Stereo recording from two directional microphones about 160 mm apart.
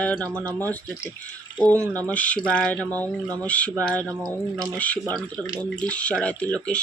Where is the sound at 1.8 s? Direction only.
20° right (ahead or behind).